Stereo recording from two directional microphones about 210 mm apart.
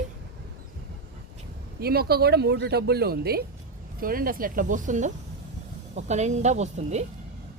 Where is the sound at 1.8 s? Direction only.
45° right (ahead or behind).